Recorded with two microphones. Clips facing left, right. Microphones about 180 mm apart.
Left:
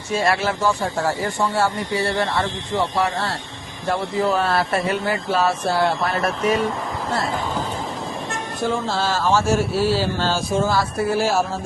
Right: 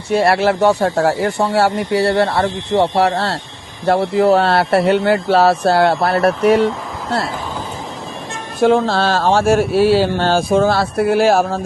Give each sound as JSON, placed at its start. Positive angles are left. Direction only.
{"t": 0.1, "sound": "speech", "side_deg": -65}
{"t": 8.6, "sound": "speech", "side_deg": -70}